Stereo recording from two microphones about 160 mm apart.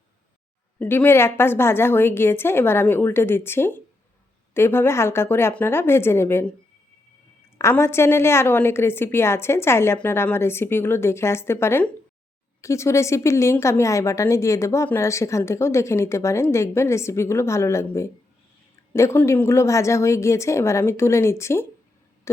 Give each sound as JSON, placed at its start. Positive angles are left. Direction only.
{"t": 0.8, "sound": "a woman's voice", "side_deg": 10}
{"t": 7.6, "sound": "a woman's voice", "side_deg": 15}